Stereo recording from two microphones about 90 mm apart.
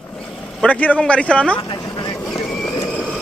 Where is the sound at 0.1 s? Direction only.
10° left (ahead or behind).